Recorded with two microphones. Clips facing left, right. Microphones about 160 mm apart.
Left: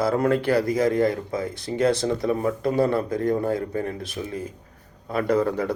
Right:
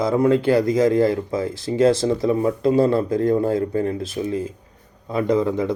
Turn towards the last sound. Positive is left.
turn(degrees=-15)  # may be behind; listen again after turning